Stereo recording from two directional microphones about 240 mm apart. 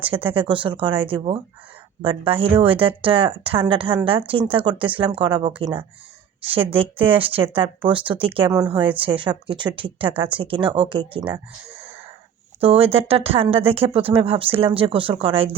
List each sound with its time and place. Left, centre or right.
0.0 s speech: right
11.7 s wheeze: centre
12.5 s speech: right